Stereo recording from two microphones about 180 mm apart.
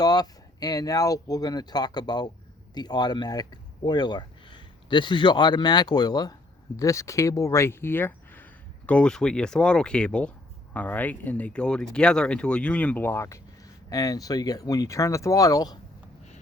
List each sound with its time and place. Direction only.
0.0 s speech: 20° left (ahead or behind)